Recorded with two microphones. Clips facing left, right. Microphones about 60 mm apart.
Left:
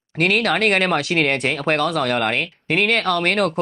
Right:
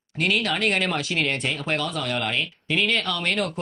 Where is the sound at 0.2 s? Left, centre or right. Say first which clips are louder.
Left 5 dB; left.